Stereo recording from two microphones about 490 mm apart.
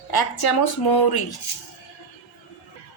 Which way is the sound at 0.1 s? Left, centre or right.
Left.